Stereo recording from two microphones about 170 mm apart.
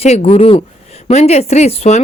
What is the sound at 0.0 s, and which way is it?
A woman's voice, 40° left (ahead or behind).